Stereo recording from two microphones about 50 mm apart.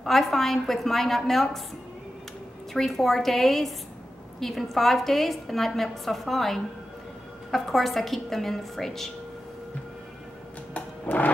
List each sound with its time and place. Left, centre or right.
0.0 s a woman's voice: centre
2.7 s a woman's voice: centre
10.7 s a sound: left